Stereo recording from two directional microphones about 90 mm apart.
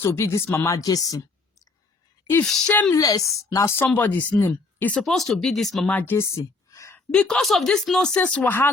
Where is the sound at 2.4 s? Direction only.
5° left (ahead or behind).